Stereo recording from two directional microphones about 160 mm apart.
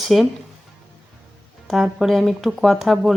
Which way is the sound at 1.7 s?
Centre (ahead or behind).